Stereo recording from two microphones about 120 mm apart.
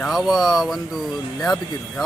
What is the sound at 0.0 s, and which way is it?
Speech, centre (ahead or behind).